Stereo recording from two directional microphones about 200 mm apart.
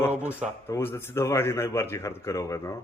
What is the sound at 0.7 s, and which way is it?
Speech, 10° left (ahead or behind).